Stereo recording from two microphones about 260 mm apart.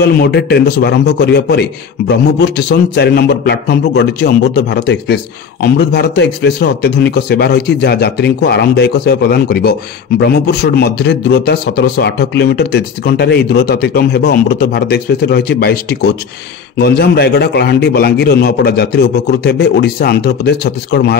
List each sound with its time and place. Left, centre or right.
0.0 s a man's voice: left